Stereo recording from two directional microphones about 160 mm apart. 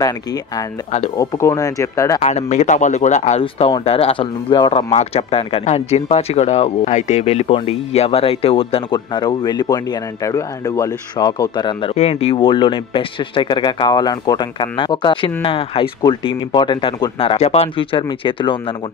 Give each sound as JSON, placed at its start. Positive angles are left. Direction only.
{"t": 0.0, "sound": "speech", "side_deg": 25}
{"t": 2.2, "sound": "speech", "side_deg": 45}
{"t": 11.9, "sound": "speech", "side_deg": 40}